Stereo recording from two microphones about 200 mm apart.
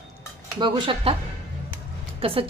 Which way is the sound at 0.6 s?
25° right (ahead or behind).